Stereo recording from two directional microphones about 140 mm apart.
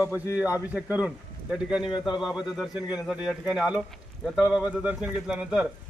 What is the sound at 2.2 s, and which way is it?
Speech, centre (ahead or behind).